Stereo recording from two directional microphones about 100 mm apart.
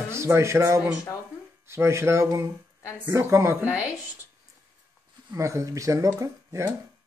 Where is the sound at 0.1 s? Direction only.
25° right (ahead or behind).